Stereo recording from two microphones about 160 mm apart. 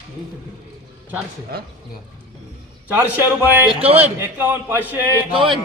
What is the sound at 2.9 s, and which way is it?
Speech, 10° right (ahead or behind).